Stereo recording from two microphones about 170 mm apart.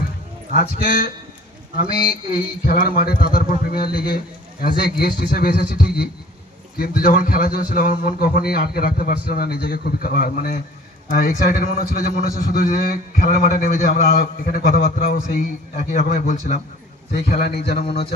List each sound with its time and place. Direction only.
0.5 s a man's voice: 55° left (ahead or behind)
16.0 s a man's voice: 45° left (ahead or behind)
17.2 s a man's voice: 65° left (ahead or behind)